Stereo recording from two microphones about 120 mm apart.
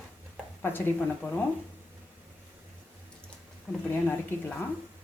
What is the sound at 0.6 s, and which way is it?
Speech, 15° left (ahead or behind).